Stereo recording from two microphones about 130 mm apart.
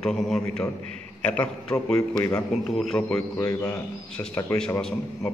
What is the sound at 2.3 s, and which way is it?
A man's voice, centre (ahead or behind).